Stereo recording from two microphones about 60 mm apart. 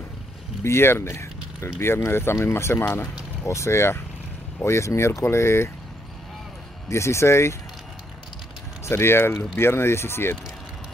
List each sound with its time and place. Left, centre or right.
0.7 s speech: left
6.9 s speech: left
8.8 s speech: left